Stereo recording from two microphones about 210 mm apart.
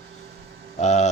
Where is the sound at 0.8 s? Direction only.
35° left (ahead or behind).